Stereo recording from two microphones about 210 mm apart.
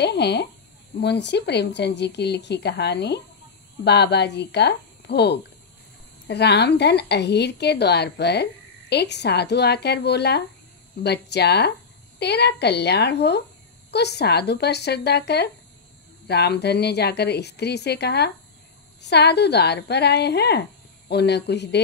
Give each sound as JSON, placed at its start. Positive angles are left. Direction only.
{"t": 0.0, "sound": "a woman's voice", "side_deg": 50}